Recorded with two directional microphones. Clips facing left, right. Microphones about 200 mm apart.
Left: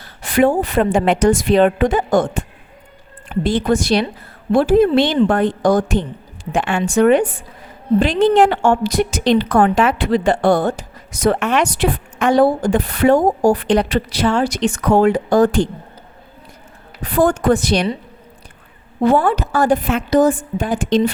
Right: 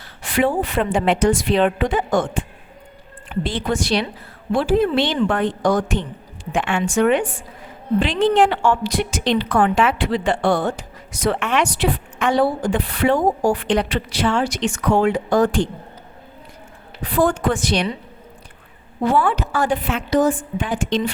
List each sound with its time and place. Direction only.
0.0 s a woman's voice: 40° left (ahead or behind)
17.0 s a woman's voice: 45° left (ahead or behind)
19.1 s a woman's voice: 40° left (ahead or behind)